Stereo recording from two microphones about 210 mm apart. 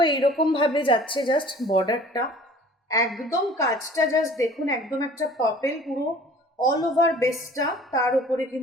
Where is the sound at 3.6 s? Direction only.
15° left (ahead or behind).